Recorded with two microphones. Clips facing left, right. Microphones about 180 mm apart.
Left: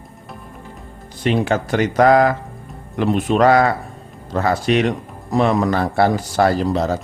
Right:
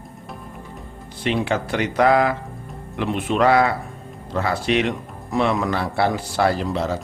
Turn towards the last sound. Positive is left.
turn(degrees=40)  # may be behind; listen again after turning